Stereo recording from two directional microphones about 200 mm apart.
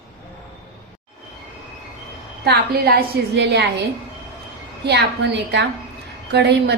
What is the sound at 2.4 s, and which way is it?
A woman's voice, 50° right (ahead or behind).